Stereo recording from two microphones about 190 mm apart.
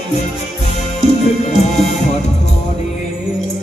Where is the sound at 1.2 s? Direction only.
35° left (ahead or behind).